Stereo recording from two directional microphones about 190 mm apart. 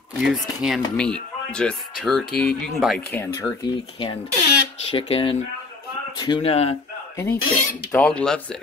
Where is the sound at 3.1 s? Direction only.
15° left (ahead or behind).